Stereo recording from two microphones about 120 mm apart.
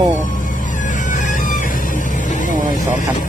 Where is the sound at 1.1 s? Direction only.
90° left.